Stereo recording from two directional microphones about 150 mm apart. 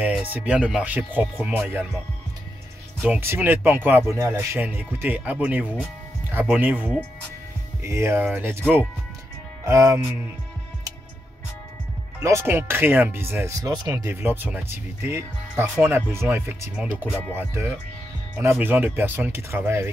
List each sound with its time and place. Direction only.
0.0 s speech: 10° right (ahead or behind)
3.0 s speech: 15° right (ahead or behind)
12.2 s speech: 20° right (ahead or behind)